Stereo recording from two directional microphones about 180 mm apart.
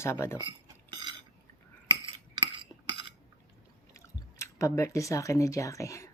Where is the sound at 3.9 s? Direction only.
15° left (ahead or behind).